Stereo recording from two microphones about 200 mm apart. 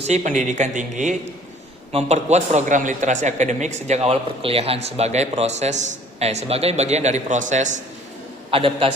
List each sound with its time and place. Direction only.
0.0 s a man's voice: 35° right (ahead or behind)